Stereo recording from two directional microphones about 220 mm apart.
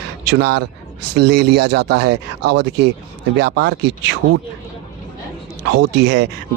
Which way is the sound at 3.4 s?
50° right (ahead or behind).